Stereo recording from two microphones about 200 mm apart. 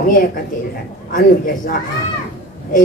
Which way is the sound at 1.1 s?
45° left (ahead or behind).